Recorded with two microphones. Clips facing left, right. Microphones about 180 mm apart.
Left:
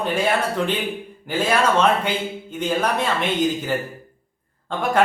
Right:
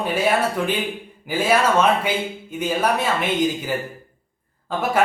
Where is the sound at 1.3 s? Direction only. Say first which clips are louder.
Right 1 dB; 10° right (ahead or behind).